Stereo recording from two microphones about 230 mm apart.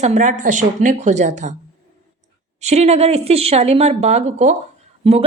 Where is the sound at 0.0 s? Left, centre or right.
Right.